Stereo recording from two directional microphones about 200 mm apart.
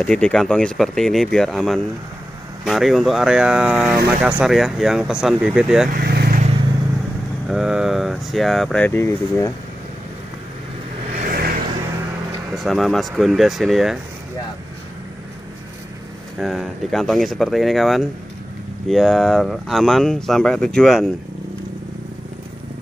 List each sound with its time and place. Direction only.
0.0 s speech: 5° left (ahead or behind)
5.9 s vehicle: 50° right (ahead or behind)
7.4 s speech: 5° right (ahead or behind)
11.1 s vehicle: 45° right (ahead or behind)
12.5 s speech: centre (ahead or behind)
16.3 s speech: centre (ahead or behind)